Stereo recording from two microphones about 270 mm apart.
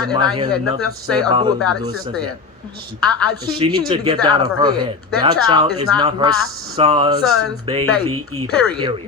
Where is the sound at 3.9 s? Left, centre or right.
Centre.